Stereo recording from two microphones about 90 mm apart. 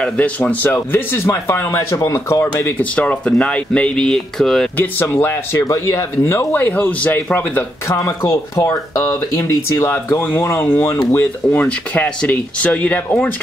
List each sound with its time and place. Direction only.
0.0 s speech: 15° left (ahead or behind); by 2.7 s 30° left (ahead or behind)
2.8 s speech: 15° left (ahead or behind)
5.1 s speech: 25° left (ahead or behind)
7.9 s speech: 35° left (ahead or behind); by 13.3 s 15° left (ahead or behind)